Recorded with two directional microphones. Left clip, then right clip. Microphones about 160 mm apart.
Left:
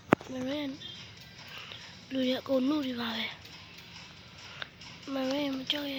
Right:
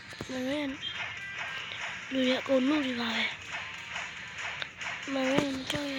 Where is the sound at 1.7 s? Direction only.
60° right (ahead or behind).